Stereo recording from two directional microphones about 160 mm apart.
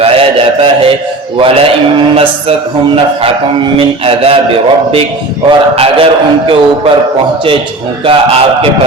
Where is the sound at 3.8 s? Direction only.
35° right (ahead or behind).